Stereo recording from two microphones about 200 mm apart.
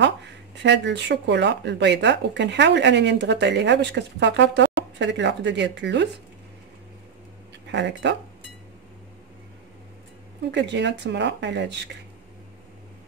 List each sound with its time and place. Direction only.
0.6 s speech: 60° right (ahead or behind)
7.6 s speech: 60° right (ahead or behind)
10.5 s speech: 60° right (ahead or behind)